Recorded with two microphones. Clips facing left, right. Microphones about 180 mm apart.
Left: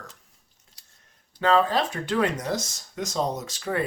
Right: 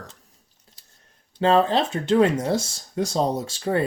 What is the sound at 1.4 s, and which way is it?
Speech, 25° right (ahead or behind).